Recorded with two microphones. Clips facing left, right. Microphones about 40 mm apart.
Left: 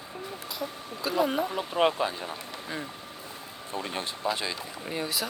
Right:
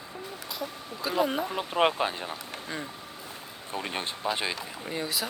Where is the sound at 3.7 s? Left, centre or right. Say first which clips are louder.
Even; right.